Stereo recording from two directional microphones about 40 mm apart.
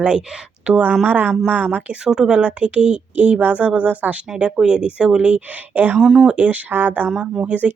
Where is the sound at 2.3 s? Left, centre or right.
Right.